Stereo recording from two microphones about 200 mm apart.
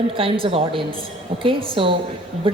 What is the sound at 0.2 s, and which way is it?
A woman's voice, 25° right (ahead or behind).